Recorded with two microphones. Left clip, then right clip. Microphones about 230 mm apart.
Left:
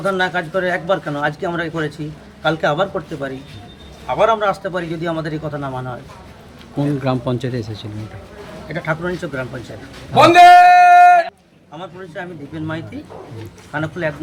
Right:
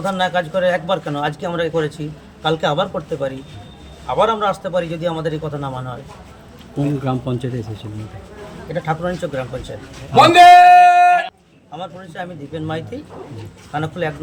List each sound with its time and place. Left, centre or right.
0.2 s a man's voice: centre
10.2 s a man's voice: left
12.2 s a man's voice: centre
13.7 s a man's voice: centre